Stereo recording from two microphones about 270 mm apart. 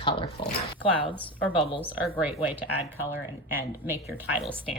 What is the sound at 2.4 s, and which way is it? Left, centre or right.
Speech, centre.